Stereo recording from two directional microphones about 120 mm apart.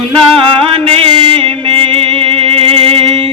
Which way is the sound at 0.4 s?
50° right (ahead or behind).